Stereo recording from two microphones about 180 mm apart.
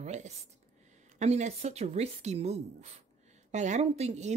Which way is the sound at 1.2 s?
40° right (ahead or behind).